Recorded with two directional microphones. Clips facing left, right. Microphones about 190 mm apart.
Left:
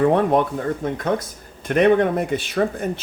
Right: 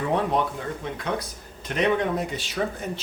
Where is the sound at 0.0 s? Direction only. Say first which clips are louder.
Left 7 dB; 55° left (ahead or behind).